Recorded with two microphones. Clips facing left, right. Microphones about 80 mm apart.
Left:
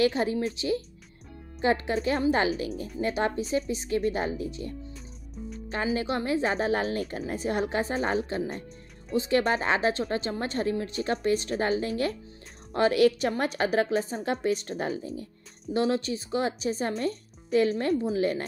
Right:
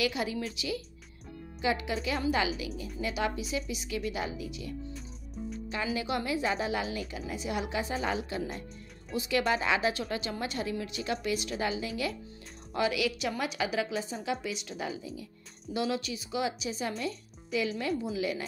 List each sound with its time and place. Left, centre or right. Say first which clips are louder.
0.0 s a woman's voice: left 7 dB; left